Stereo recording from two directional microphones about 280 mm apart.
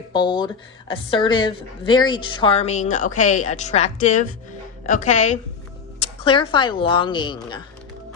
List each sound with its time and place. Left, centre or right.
0.1 s a woman's voice: centre